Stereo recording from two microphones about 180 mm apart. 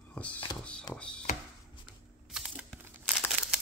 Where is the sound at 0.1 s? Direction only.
10° left (ahead or behind).